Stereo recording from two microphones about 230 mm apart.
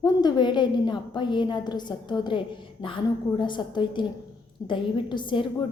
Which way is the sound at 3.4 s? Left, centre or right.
Centre.